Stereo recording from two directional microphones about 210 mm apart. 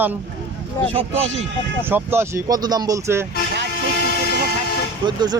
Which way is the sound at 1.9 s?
10° right (ahead or behind).